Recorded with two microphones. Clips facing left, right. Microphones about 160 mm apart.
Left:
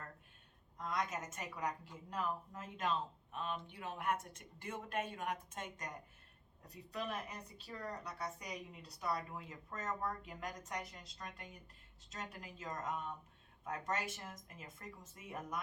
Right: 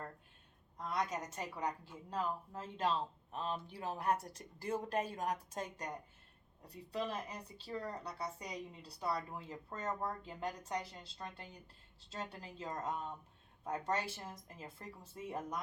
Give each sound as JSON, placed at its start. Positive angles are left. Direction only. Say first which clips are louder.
{"t": 0.8, "sound": "a woman's voice", "louder": "right 2 dB", "side_deg": -30}